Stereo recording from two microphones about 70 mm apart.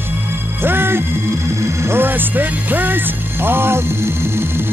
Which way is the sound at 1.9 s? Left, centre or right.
Right.